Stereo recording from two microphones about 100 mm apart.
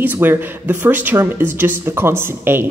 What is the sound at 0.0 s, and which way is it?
A woman's voice, 20° right (ahead or behind).